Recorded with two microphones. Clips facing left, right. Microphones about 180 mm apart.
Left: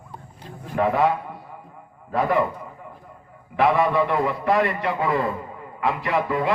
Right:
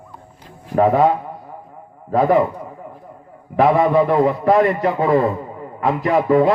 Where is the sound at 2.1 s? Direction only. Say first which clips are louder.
Right 7 dB; 40° right (ahead or behind).